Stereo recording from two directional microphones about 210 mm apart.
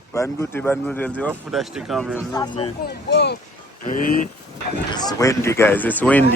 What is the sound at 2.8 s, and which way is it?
Speech, 50° left (ahead or behind).